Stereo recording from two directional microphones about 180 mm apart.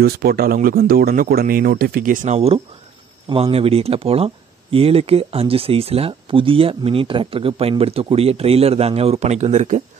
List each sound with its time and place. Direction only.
0.0 s speech: 60° right (ahead or behind); by 9.8 s 40° right (ahead or behind)